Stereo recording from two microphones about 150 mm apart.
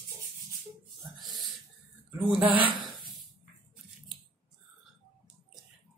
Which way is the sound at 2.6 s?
35° right (ahead or behind).